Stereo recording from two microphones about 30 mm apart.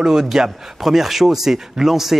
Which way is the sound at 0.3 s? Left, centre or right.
Centre.